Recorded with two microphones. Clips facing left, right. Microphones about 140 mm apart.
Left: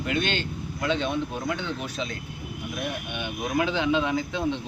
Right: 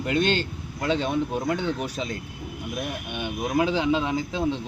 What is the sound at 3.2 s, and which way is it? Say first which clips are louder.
Speech: right 3 dB; 35° right (ahead or behind).